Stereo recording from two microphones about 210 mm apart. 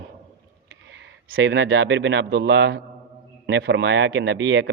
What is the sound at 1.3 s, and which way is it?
A man's voice, 65° right (ahead or behind).